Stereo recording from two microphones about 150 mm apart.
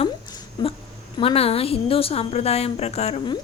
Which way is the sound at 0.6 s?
30° left (ahead or behind).